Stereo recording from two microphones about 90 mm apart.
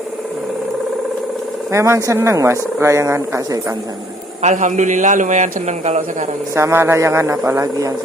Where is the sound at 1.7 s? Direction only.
30° right (ahead or behind).